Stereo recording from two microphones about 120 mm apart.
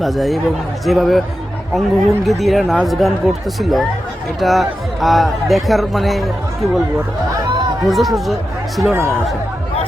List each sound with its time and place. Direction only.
0.0 s a man's voice: centre (ahead or behind)
7.9 s a man's voice: centre (ahead or behind)
8.9 s speech: 20° right (ahead or behind)